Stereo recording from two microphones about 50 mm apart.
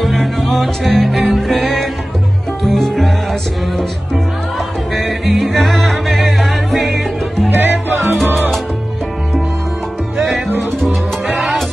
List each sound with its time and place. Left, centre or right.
0.0 s music: centre
4.9 s music: centre
7.5 s music: right